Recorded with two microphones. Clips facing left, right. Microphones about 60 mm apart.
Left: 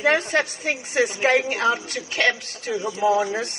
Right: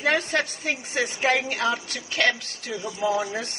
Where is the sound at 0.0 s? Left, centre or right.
Left.